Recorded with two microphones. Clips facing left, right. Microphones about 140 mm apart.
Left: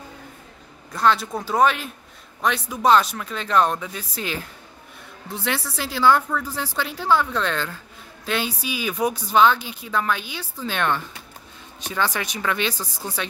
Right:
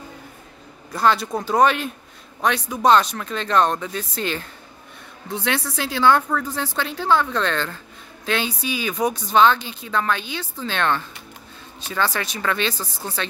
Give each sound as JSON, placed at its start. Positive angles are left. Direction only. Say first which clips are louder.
{"t": 0.9, "sound": "a woman's voice", "louder": "right 1 dB", "side_deg": 0}